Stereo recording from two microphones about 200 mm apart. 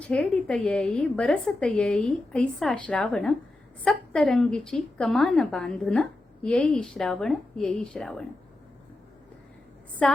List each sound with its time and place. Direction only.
0.0 s a woman's voice: 5° left (ahead or behind)
10.0 s a woman's voice: centre (ahead or behind)